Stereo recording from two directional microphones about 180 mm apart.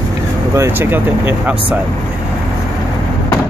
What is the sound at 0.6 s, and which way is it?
Speech, 10° right (ahead or behind).